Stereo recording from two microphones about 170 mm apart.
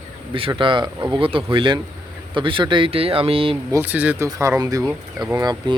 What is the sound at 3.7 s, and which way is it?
Speech, 10° right (ahead or behind).